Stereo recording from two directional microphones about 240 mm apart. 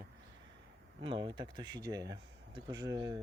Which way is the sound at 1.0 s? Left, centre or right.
Centre.